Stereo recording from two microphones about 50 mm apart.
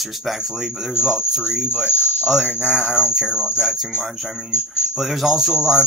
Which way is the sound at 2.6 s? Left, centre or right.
Centre.